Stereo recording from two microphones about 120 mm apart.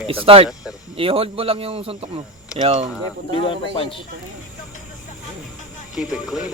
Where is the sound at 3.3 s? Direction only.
45° left (ahead or behind).